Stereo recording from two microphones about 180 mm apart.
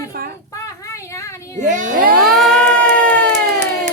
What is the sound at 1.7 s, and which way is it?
Speech, 50° right (ahead or behind).